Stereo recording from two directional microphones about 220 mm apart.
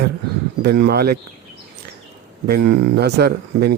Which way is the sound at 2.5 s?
45° right (ahead or behind).